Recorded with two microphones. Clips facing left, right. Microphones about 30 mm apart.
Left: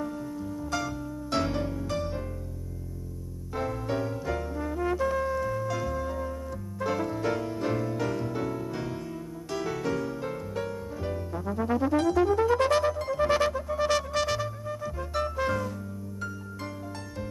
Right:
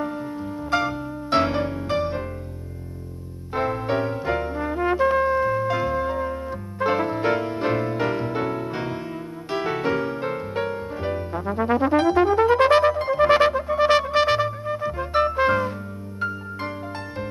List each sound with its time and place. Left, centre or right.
0.0 s music: right
3.5 s music: right